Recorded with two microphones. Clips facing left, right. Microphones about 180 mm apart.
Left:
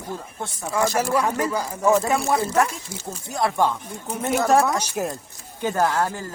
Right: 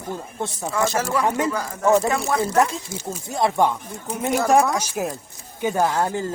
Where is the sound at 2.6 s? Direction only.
20° right (ahead or behind).